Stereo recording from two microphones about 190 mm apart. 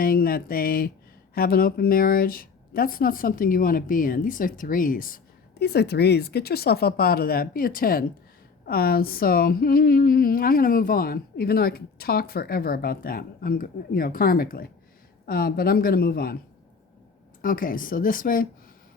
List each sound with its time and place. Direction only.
0.0 s a woman's voice: 50° left (ahead or behind)
17.4 s a woman's voice: 45° left (ahead or behind)